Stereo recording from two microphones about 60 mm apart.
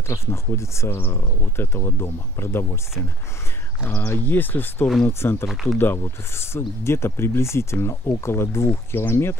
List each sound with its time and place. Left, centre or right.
0.1 s speech: left
5.2 s speech: left
5.5 s speech: centre
5.8 s speech: left